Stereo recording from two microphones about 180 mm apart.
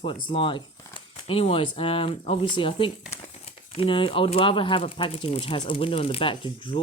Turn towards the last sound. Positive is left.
turn(degrees=30)  # may be behind; listen again after turning